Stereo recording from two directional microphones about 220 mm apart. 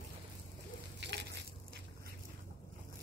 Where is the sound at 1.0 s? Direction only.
50° right (ahead or behind).